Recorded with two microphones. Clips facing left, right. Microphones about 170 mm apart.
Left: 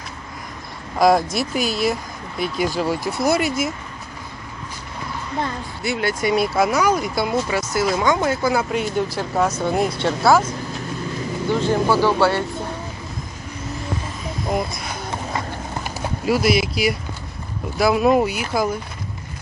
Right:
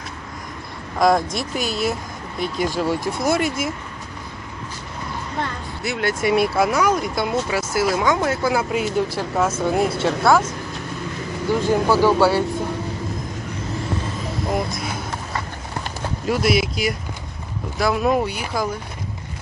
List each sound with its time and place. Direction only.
0.9 s speech: 5° left (ahead or behind)
5.8 s speech: centre (ahead or behind)
11.6 s speech: 10° right (ahead or behind)
14.5 s speech: centre (ahead or behind)
15.8 s horse: 5° left (ahead or behind)
17.7 s speech: 10° left (ahead or behind)